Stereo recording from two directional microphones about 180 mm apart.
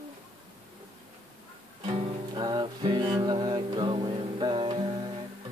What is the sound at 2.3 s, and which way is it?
Music, 25° right (ahead or behind).